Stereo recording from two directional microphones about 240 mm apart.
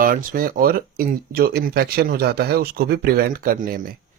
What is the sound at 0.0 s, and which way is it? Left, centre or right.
Speech, right.